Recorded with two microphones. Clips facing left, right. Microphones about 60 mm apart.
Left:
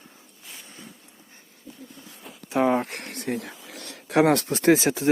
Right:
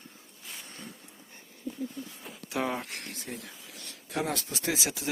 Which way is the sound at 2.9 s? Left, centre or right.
Left.